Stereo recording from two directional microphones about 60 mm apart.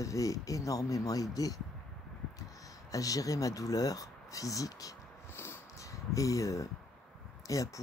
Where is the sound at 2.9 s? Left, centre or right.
Left.